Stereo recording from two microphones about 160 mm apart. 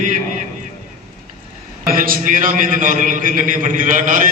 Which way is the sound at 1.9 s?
60° right (ahead or behind).